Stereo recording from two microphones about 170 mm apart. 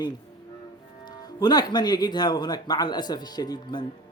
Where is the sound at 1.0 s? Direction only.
25° left (ahead or behind).